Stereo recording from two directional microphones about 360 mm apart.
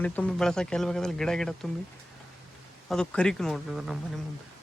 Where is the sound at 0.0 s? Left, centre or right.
Centre.